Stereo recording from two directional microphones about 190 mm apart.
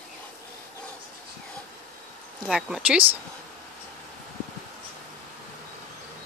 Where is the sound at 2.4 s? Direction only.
5° right (ahead or behind).